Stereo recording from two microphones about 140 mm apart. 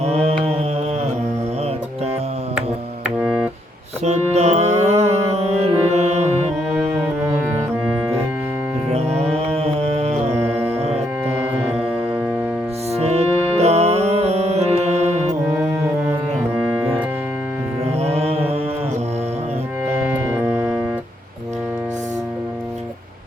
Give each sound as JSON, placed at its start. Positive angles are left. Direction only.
{"t": 0.0, "sound": "music", "side_deg": -50}
{"t": 3.0, "sound": "music", "side_deg": -5}
{"t": 4.0, "sound": "music", "side_deg": -55}
{"t": 8.9, "sound": "music", "side_deg": -45}
{"t": 12.9, "sound": "music", "side_deg": -50}
{"t": 18.0, "sound": "music", "side_deg": -45}
{"t": 20.1, "sound": "music", "side_deg": -10}